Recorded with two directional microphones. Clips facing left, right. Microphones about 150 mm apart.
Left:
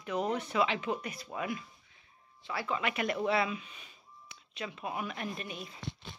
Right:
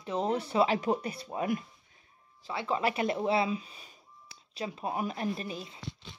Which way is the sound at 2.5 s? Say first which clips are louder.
Right 4 dB; 35° right (ahead or behind).